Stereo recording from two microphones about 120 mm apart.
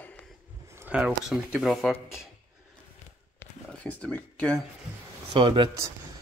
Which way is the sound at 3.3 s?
10° left (ahead or behind).